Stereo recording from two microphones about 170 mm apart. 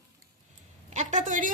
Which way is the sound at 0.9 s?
45° right (ahead or behind).